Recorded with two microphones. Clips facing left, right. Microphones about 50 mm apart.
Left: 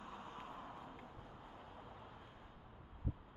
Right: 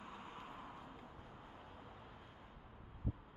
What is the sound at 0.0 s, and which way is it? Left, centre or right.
Vehicle, centre.